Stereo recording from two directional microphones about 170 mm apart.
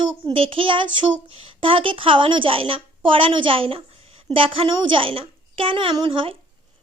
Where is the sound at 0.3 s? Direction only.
30° right (ahead or behind).